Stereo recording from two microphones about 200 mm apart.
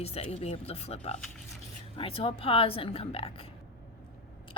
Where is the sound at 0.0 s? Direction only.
30° left (ahead or behind).